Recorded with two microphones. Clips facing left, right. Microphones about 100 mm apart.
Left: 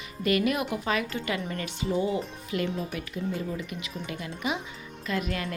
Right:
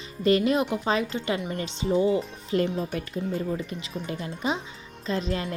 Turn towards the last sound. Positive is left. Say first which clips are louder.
# right 2 dB
turn(degrees=-30)  # may be behind; listen again after turning